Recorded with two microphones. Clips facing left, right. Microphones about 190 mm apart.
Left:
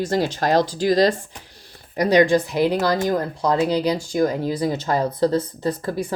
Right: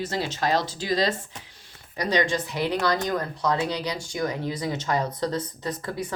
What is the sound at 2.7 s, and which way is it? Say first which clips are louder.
A woman's voice: left 1 dB; 30° left (ahead or behind).